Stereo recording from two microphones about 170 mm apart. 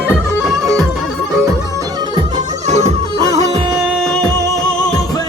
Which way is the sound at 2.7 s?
40° right (ahead or behind).